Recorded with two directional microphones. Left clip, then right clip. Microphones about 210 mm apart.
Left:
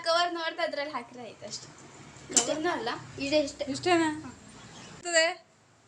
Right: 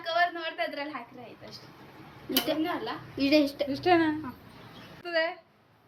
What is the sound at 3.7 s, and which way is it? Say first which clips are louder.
Speech: right 2 dB; centre (ahead or behind).